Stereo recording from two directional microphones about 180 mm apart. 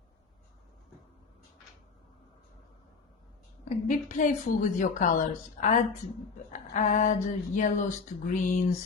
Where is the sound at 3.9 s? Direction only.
45° left (ahead or behind).